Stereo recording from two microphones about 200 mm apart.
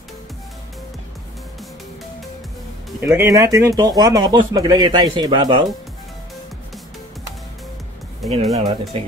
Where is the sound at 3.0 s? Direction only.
15° right (ahead or behind).